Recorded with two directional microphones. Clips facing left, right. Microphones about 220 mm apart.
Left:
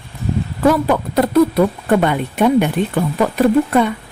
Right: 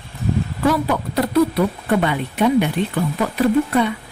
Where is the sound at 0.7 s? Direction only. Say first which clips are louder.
Left 5 dB; 50° left (ahead or behind).